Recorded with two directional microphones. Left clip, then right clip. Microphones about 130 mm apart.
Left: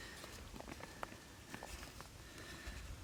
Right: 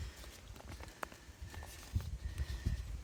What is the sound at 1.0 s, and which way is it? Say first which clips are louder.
Walk: right 4 dB; 80° right.